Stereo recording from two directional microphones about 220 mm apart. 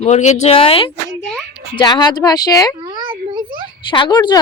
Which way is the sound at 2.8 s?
20° right (ahead or behind).